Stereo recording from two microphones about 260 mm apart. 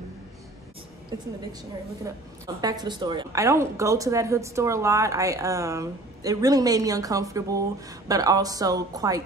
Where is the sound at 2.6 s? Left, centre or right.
Centre.